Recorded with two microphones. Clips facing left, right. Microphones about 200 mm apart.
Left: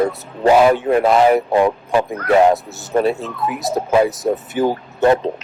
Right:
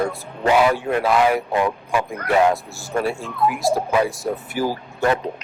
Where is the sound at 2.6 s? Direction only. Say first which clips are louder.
Left 6 dB; 20° left (ahead or behind).